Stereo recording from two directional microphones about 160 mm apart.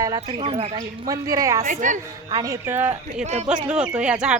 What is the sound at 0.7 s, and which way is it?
Speech, 20° right (ahead or behind).